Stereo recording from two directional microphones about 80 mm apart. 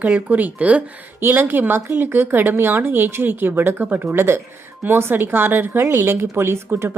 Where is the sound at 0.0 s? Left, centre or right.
Centre.